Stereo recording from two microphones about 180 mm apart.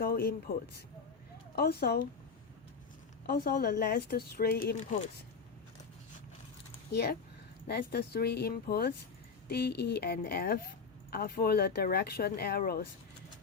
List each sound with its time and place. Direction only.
0.0 s speech: 60° left (ahead or behind)
1.5 s speech: 60° left (ahead or behind)
3.2 s speech: 55° left (ahead or behind)
6.9 s speech: 60° left (ahead or behind)